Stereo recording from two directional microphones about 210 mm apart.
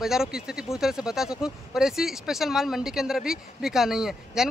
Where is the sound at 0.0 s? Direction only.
Centre (ahead or behind).